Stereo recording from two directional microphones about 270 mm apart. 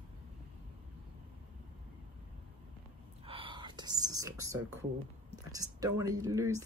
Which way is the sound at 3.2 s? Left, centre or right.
Centre.